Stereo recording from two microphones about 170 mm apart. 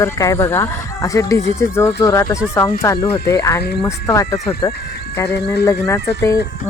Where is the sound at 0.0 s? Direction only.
20° left (ahead or behind).